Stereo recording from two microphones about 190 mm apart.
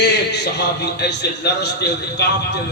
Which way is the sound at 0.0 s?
60° left (ahead or behind).